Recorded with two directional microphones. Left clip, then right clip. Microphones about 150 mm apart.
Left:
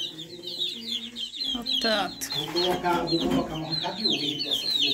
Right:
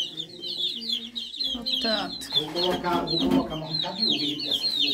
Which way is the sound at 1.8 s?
5° left (ahead or behind).